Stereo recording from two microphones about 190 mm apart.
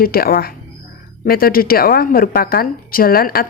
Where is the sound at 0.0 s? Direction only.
50° left (ahead or behind).